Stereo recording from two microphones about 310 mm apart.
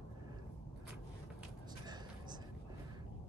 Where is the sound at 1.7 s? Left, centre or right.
Centre.